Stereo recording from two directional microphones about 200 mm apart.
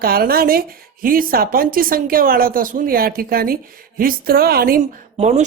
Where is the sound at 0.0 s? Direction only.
50° right (ahead or behind).